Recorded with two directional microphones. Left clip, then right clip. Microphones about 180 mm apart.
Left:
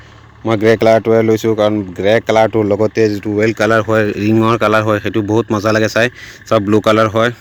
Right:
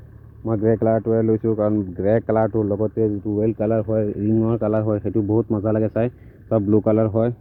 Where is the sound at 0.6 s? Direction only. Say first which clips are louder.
Left 9 dB; 30° left (ahead or behind).